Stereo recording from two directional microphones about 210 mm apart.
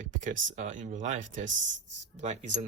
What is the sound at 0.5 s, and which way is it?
Speech, 35° right (ahead or behind).